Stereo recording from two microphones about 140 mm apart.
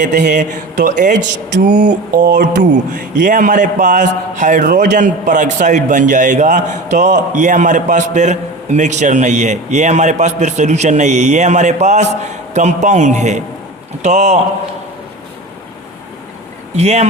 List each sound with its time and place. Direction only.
0.0 s a man's voice: 65° right (ahead or behind)
16.7 s speech: 55° right (ahead or behind)